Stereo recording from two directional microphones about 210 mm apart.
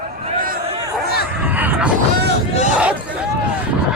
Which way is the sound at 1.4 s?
10° right (ahead or behind).